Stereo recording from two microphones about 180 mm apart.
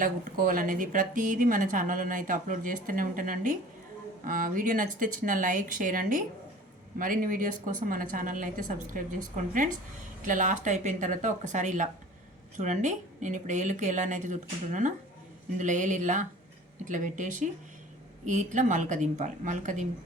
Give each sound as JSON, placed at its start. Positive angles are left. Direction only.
{"t": 0.0, "sound": "a woman's voice", "side_deg": -50}